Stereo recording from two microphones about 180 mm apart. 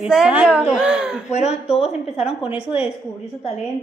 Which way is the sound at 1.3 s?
40° left (ahead or behind).